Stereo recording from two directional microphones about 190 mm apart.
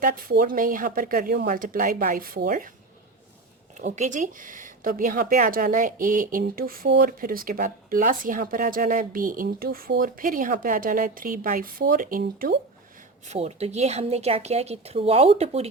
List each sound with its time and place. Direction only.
0.0 s speech: 50° right (ahead or behind)
3.8 s speech: 40° right (ahead or behind)
13.2 s a woman's voice: 35° right (ahead or behind)